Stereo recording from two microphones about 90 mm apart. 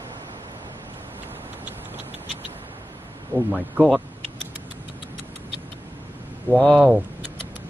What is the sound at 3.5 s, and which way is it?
Speech, 15° right (ahead or behind).